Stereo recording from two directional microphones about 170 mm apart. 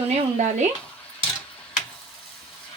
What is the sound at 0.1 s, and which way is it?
Speech, 45° right (ahead or behind).